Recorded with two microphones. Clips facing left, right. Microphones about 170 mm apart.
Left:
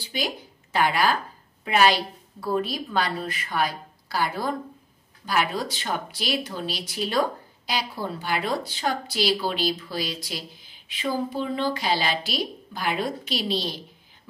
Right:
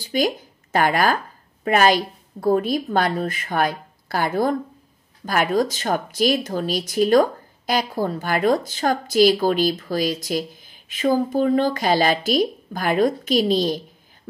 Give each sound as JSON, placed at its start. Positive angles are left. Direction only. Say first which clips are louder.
{"t": 0.0, "sound": "speech", "louder": "right 9 dB", "side_deg": -45}